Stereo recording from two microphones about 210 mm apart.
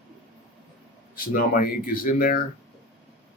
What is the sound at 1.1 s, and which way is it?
Speech, 40° left (ahead or behind).